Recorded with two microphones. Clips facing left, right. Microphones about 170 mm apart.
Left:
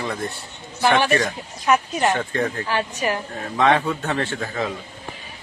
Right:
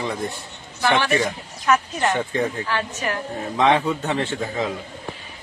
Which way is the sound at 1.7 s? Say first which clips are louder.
Left 1 dB; 15° left (ahead or behind).